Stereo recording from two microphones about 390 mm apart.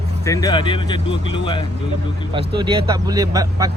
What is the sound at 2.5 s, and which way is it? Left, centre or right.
Speech, centre.